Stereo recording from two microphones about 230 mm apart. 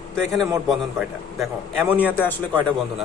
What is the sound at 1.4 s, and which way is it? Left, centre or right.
Speech, centre.